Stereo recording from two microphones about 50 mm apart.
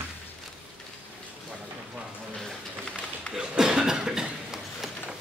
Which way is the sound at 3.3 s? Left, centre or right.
Left.